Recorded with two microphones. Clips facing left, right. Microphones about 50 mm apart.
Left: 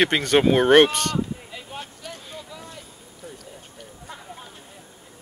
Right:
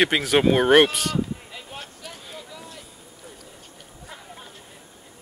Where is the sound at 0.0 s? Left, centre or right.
Centre.